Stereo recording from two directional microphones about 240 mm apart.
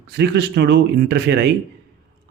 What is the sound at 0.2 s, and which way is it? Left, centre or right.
Speech, right.